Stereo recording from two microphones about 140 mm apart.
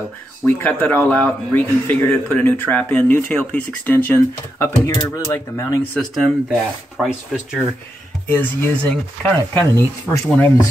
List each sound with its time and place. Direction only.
0.5 s speech: 15° left (ahead or behind)
5.9 s speech: centre (ahead or behind)
8.3 s speech: 10° left (ahead or behind)